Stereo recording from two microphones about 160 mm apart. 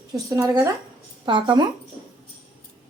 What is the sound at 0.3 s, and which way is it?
Speech, 20° right (ahead or behind).